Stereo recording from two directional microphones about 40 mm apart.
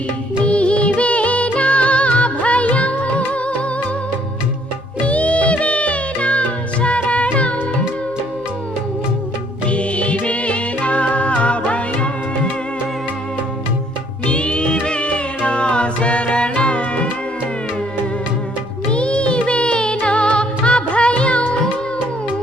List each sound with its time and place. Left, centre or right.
0.4 s music of bollywood: left
0.9 s music: left
5.0 s music: left
9.6 s music: left
14.3 s music: left
18.9 s music: left